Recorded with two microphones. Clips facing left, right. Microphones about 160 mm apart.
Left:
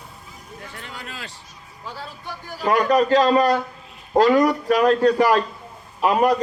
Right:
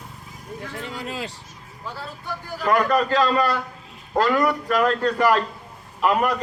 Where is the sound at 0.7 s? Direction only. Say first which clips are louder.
Right 7 dB; 30° right (ahead or behind).